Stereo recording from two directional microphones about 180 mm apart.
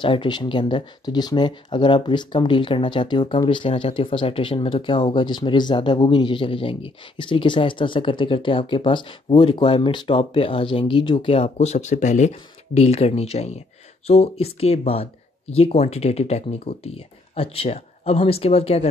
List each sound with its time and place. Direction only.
0.0 s speech: 25° left (ahead or behind)